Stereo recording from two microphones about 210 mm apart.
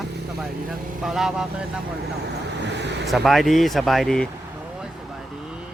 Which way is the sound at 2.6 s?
55° right (ahead or behind).